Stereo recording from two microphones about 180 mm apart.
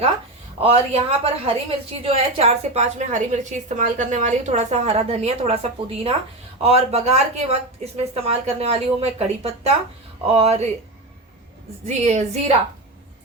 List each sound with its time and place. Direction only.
0.6 s a woman's voice: 30° right (ahead or behind)
6.6 s a woman's voice: 35° right (ahead or behind)
11.9 s a woman's voice: 35° right (ahead or behind)